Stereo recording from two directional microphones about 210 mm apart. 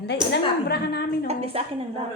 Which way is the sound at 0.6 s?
50° left (ahead or behind).